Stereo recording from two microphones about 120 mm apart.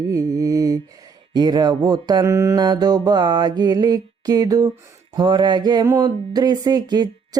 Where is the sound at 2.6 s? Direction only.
35° right (ahead or behind).